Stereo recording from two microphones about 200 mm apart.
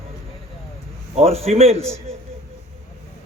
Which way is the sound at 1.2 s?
30° right (ahead or behind).